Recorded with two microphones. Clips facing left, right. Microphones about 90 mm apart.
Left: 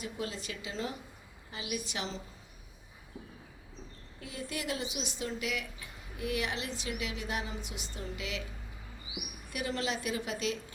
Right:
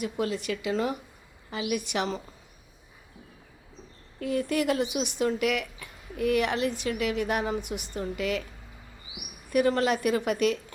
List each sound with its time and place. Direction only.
0.0 s speech: 65° right (ahead or behind)
4.2 s speech: 60° right (ahead or behind)
9.5 s speech: 50° right (ahead or behind)